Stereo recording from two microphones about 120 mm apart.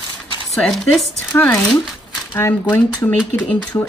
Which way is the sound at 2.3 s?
20° left (ahead or behind).